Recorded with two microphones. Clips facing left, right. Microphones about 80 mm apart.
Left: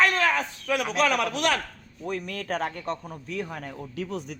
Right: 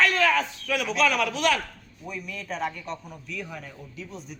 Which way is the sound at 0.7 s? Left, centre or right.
Left.